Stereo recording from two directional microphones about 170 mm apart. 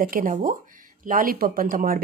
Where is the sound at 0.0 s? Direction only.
55° right (ahead or behind).